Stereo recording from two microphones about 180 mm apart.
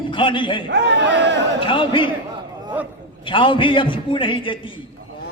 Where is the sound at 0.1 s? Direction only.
30° left (ahead or behind).